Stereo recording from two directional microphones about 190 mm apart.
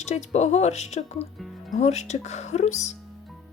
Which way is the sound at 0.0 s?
35° left (ahead or behind).